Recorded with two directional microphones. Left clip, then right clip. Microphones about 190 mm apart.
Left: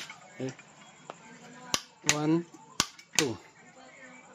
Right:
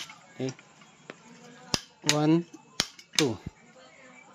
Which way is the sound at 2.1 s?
30° right (ahead or behind).